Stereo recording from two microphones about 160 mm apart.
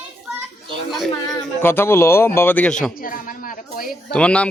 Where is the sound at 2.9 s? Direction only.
60° left (ahead or behind).